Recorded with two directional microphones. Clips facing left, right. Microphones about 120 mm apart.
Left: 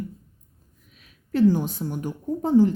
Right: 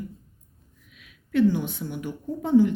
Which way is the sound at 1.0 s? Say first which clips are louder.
Left 1 dB; 40° left (ahead or behind).